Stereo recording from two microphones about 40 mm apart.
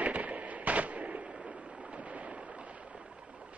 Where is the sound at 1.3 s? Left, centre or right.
Centre.